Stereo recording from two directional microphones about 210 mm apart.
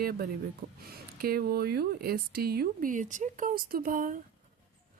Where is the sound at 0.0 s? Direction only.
45° right (ahead or behind).